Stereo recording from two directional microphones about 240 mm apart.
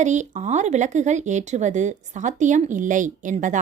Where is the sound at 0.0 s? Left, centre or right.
Right.